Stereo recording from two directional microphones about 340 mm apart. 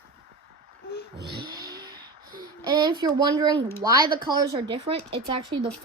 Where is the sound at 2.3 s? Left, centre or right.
Centre.